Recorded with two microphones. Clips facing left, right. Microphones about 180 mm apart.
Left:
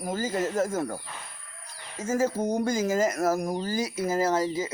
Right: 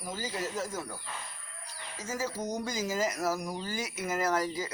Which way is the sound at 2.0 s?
50° left (ahead or behind).